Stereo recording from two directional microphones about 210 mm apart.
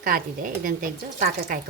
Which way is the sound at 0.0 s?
40° right (ahead or behind).